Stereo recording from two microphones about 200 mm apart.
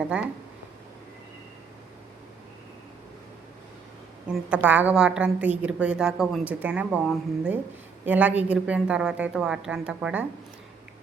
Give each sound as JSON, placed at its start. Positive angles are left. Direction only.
{"t": 0.0, "sound": "a woman's voice", "side_deg": -5}
{"t": 4.3, "sound": "a woman's voice", "side_deg": -5}